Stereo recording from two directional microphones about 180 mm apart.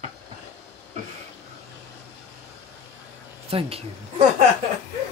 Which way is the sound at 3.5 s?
35° right (ahead or behind).